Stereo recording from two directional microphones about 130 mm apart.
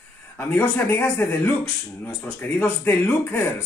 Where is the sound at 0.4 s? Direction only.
15° left (ahead or behind).